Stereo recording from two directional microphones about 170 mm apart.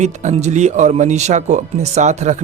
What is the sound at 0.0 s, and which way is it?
Speech, 45° right (ahead or behind).